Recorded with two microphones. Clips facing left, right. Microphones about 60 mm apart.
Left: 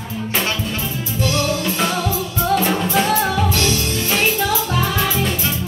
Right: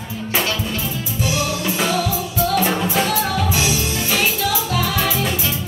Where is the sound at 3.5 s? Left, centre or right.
Centre.